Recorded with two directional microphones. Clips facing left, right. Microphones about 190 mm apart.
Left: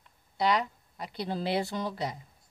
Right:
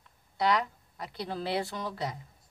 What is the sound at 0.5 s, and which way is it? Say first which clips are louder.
Speech: even; 20° left (ahead or behind).